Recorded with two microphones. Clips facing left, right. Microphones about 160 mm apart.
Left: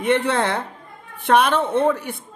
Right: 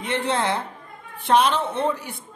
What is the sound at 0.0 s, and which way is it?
Speech, 60° left (ahead or behind).